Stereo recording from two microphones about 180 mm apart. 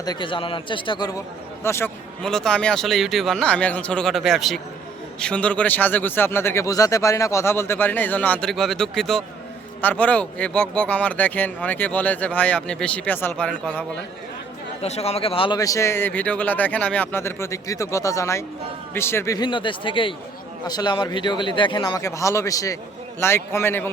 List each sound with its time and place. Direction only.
0.0 s speech: 25° left (ahead or behind)
2.2 s speech: 5° left (ahead or behind)
14.8 s speech: 35° left (ahead or behind); by 23.9 s 15° left (ahead or behind)